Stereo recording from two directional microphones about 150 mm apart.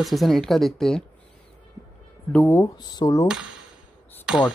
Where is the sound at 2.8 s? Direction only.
25° left (ahead or behind).